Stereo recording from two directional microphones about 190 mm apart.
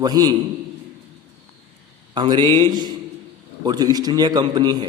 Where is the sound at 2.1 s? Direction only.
25° right (ahead or behind).